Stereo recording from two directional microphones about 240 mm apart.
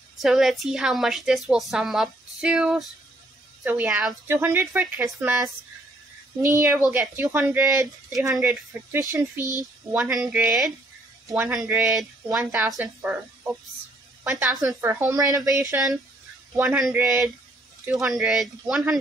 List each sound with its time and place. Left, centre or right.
0.2 s a woman's voice: centre
6.5 s a woman's voice: centre
9.4 s speech: centre
9.9 s a woman's voice: centre